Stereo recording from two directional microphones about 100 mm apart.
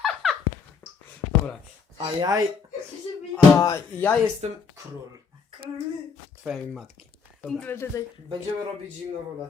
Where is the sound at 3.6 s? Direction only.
40° left (ahead or behind).